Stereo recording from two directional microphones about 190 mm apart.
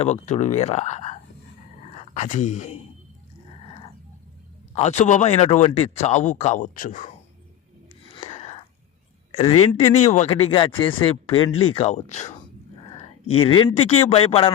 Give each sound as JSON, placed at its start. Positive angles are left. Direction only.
{"t": 0.0, "sound": "speech", "side_deg": 35}
{"t": 2.1, "sound": "speech", "side_deg": 40}
{"t": 4.7, "sound": "speech", "side_deg": 35}
{"t": 8.1, "sound": "whispering", "side_deg": 30}
{"t": 9.3, "sound": "speech", "side_deg": 30}
{"t": 13.2, "sound": "a man's voice", "side_deg": 25}